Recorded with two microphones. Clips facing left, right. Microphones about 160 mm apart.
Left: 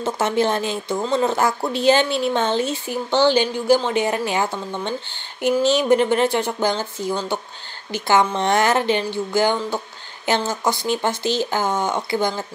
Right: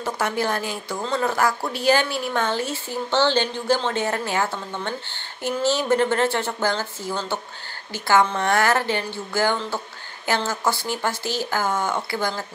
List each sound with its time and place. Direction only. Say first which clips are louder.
0.0 s a woman's voice: left 5 dB; 25° left (ahead or behind)